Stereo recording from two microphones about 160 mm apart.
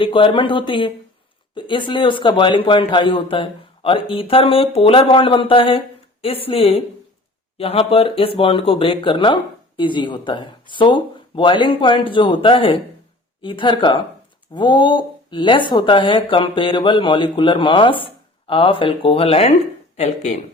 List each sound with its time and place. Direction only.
0.0 s speech: 30° left (ahead or behind)